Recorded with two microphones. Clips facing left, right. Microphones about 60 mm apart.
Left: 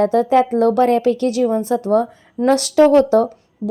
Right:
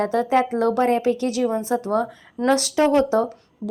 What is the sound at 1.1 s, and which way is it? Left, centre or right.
Speech, left.